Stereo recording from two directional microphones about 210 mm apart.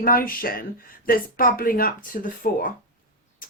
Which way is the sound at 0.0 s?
45° left (ahead or behind).